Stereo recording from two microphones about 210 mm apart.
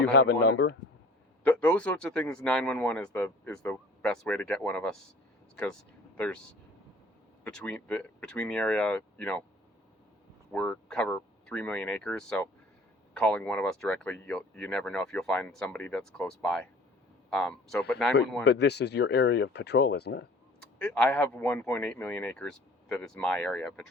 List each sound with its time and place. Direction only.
0.0 s speech: 55° left (ahead or behind)
1.5 s speech: 5° left (ahead or behind)
6.1 s speech: 5° left (ahead or behind)
7.4 s speech: 5° left (ahead or behind)
10.5 s speech: 5° left (ahead or behind)
18.4 s speech: 55° left (ahead or behind)
20.7 s speech: 5° left (ahead or behind)